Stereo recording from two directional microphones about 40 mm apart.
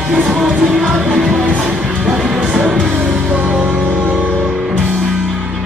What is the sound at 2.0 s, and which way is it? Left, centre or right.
Music, centre.